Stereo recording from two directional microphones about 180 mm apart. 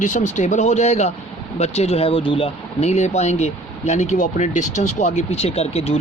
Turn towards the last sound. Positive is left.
turn(degrees=35)  # may be behind; listen again after turning